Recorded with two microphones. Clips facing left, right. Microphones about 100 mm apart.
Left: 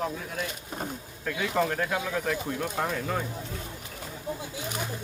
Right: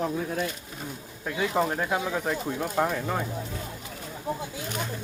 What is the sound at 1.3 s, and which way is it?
Speech, 20° right (ahead or behind).